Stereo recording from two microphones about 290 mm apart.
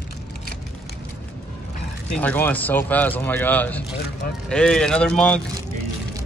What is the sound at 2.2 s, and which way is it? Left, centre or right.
Speech, centre.